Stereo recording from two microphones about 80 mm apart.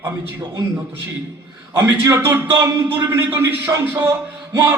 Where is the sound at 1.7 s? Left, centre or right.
Right.